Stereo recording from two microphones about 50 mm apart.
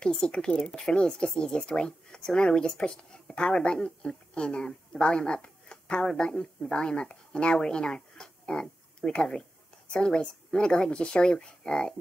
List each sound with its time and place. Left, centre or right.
0.0 s a woman's voice: centre